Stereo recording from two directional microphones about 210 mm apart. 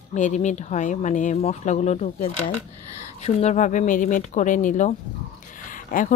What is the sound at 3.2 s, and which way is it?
Speech, 30° left (ahead or behind).